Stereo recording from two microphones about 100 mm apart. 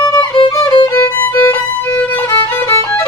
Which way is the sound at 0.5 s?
40° left (ahead or behind).